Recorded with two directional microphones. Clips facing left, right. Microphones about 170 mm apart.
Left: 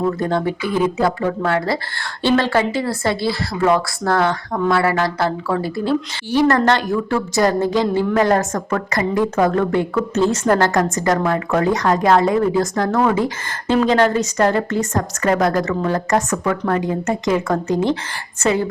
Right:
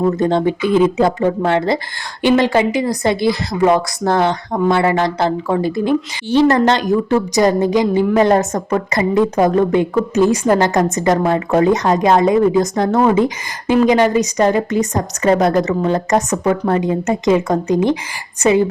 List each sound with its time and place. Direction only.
0.0 s a woman's voice: 25° right (ahead or behind)